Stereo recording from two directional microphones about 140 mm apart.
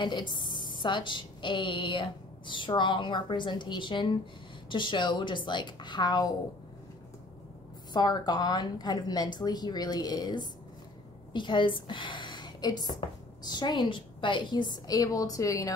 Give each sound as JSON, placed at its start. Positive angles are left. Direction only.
{"t": 0.0, "sound": "a woman's voice", "side_deg": 35}
{"t": 7.9, "sound": "a woman's voice", "side_deg": 30}